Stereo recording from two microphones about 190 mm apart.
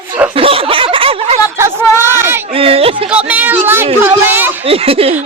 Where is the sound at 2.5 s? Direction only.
30° right (ahead or behind).